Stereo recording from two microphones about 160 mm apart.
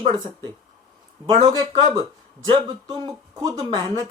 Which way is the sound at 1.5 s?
25° right (ahead or behind).